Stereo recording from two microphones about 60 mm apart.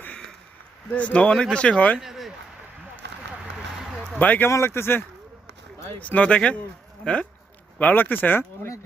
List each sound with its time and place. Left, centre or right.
0.9 s speech: left
2.0 s a sound: centre
4.2 s speech: left
4.4 s speech: left
6.0 s speech: left
7.8 s speech: left